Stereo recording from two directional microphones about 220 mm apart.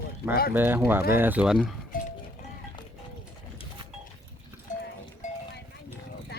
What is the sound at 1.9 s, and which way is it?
Music, 40° left (ahead or behind).